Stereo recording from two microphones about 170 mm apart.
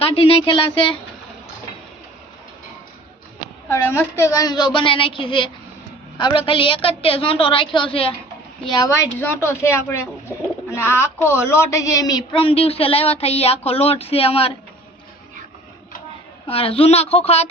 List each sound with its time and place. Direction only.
0.0 s speech: 35° left (ahead or behind)
3.7 s a woman's voice: 15° left (ahead or behind)
9.1 s speech: 15° left (ahead or behind); by 14.5 s 35° left (ahead or behind)
16.5 s speech: 35° left (ahead or behind)